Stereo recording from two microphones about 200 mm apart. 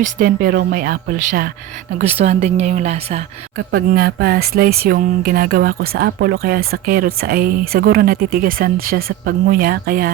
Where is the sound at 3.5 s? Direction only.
50° right (ahead or behind).